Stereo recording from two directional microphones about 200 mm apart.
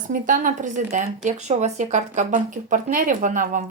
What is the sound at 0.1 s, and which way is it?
Speech, 40° right (ahead or behind).